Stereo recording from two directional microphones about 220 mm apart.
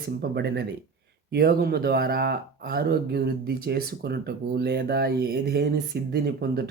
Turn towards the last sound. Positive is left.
turn(degrees=-45)  # may be behind; listen again after turning